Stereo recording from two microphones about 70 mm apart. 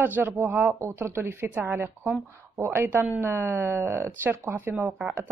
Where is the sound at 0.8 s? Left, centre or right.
Right.